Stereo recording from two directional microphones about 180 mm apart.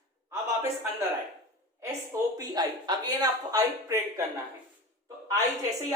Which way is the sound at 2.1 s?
20° right (ahead or behind).